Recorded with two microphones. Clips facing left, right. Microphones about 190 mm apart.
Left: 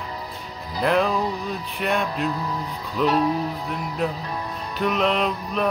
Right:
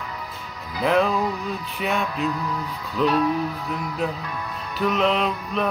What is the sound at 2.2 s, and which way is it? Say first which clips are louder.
Music: even; 35° left (ahead or behind).